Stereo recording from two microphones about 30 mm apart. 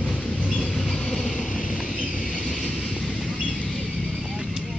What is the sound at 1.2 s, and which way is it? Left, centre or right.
Vehicle, centre.